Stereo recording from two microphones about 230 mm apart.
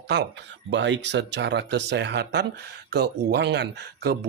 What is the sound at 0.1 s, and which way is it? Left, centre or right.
Speech, right.